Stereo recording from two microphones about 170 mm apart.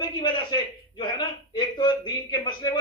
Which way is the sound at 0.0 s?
25° left (ahead or behind).